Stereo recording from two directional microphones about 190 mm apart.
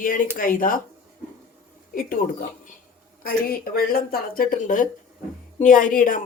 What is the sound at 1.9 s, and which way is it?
Speech, 50° left (ahead or behind).